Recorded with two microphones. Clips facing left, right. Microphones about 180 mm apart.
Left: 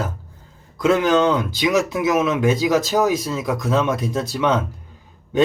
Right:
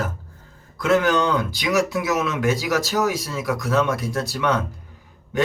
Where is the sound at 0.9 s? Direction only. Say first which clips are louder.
Left 3 dB; 15° left (ahead or behind).